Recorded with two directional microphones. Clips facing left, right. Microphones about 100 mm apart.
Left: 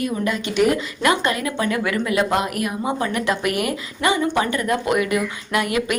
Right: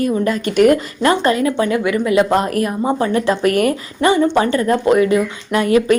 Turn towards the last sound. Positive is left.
turn(degrees=-30)  # may be behind; listen again after turning